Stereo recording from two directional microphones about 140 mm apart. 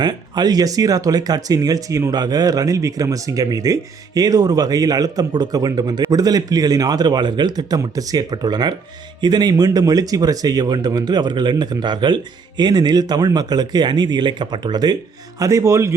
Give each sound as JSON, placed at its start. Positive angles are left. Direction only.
{"t": 0.0, "sound": "speech", "side_deg": -30}